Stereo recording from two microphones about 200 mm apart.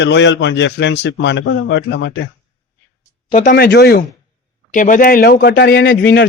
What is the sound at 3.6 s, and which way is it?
Speech, 55° left (ahead or behind).